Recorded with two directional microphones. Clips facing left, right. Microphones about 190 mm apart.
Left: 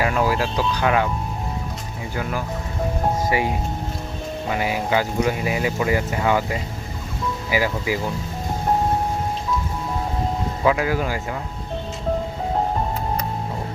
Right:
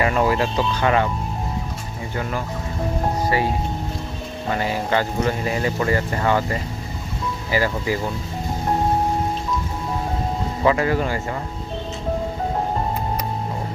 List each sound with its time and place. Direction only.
0.0 s speech: 5° left (ahead or behind)
3.2 s speech: 15° left (ahead or behind)
10.6 s speech: 5° left (ahead or behind)